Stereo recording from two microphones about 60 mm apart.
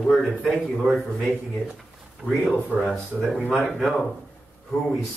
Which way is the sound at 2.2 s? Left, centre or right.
Left.